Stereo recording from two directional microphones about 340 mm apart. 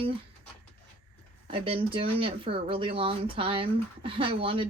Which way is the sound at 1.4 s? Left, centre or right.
Centre.